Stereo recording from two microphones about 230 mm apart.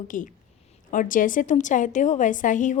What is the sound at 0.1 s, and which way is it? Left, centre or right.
A woman's voice, left.